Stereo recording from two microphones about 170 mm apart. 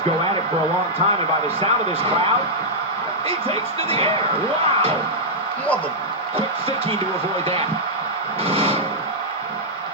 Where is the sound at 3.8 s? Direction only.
35° right (ahead or behind).